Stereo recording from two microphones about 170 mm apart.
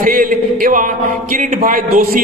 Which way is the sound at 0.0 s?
55° right (ahead or behind).